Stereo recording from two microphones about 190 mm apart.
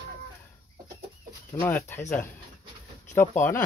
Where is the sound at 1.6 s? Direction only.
10° left (ahead or behind).